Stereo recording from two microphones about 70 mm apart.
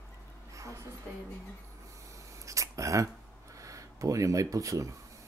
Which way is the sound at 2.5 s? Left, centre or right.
Right.